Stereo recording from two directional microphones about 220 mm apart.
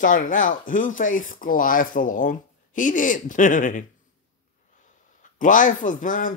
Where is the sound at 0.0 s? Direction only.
35° left (ahead or behind).